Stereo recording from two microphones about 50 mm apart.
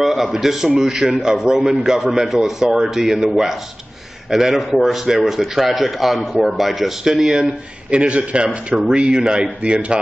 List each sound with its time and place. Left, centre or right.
0.0 s a man's voice: centre; by 9.9 s right